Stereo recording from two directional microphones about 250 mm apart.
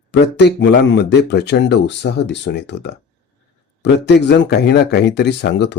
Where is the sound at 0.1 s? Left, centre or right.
Left.